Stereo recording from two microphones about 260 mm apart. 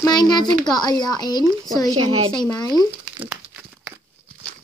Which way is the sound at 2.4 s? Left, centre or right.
Centre.